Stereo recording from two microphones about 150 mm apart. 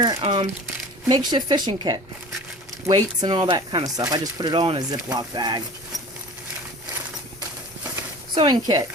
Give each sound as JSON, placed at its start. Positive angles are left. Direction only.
{"t": 0.2, "sound": "speech", "side_deg": -35}
{"t": 8.4, "sound": "speech", "side_deg": -30}